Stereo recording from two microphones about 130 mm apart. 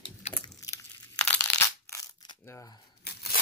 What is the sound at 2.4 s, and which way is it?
Scissors, 25° left (ahead or behind).